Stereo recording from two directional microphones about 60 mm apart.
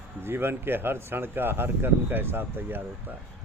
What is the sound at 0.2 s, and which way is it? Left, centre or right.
Speech, right.